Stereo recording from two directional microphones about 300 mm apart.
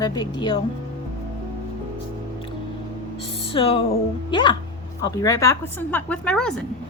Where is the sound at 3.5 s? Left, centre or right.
Centre.